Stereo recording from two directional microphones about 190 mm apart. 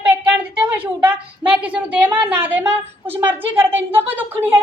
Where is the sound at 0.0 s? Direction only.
5° right (ahead or behind).